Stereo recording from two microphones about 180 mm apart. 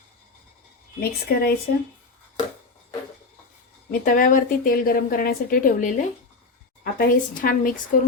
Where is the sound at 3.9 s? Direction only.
50° left (ahead or behind).